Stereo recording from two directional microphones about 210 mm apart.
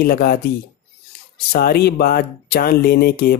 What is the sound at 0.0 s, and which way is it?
Speech, 45° left (ahead or behind).